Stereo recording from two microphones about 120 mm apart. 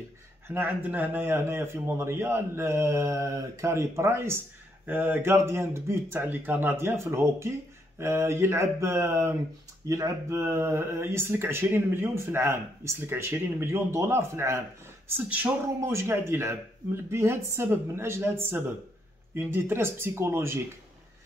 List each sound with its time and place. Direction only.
0.5 s speech: 15° right (ahead or behind)